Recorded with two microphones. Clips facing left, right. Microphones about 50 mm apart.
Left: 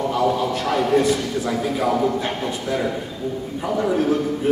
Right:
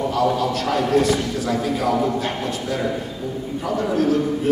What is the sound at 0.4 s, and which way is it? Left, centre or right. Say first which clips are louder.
A man's voice: even; centre.